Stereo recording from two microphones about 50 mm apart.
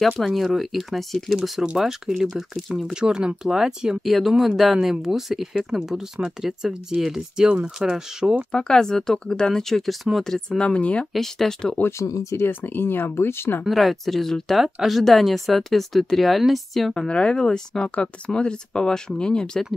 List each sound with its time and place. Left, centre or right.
0.2 s speech: centre
8.5 s speech: centre
10.6 s speech: left
11.1 s speech: centre
12.0 s speech: left
12.4 s speech: left
13.7 s speech: centre
17.1 s speech: centre